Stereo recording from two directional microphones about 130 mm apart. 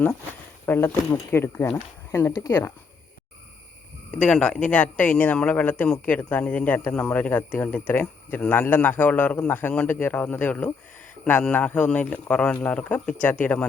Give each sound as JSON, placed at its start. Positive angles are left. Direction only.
{"t": 0.6, "sound": "speech", "side_deg": 20}
{"t": 4.1, "sound": "speech", "side_deg": 5}